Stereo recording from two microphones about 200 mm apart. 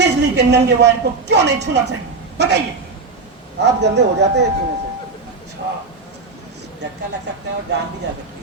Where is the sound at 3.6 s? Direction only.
60° right (ahead or behind).